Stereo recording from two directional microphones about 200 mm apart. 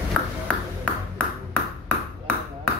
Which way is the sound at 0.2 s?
5° left (ahead or behind).